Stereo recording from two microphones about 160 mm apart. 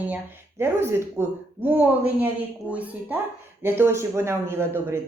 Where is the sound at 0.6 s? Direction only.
15° right (ahead or behind).